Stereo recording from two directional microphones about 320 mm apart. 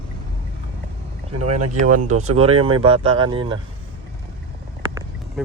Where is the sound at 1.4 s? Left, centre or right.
Right.